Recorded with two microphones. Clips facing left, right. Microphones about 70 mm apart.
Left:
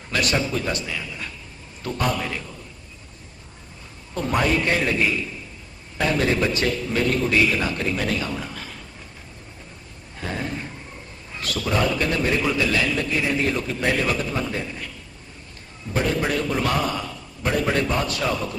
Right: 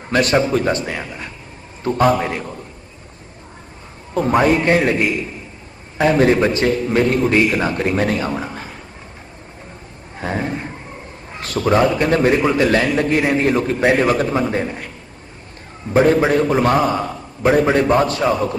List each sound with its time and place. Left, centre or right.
0.1 s a man's voice: right
4.1 s a man's voice: right
10.2 s a sound: right
11.9 s a man's voice: right